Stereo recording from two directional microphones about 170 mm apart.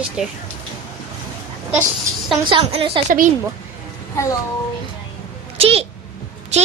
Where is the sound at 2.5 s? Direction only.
30° right (ahead or behind).